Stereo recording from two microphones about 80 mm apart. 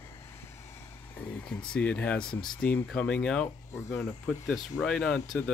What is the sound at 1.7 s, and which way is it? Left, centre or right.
Speech, centre.